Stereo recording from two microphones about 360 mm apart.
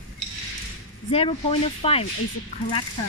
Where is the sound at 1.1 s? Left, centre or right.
Centre.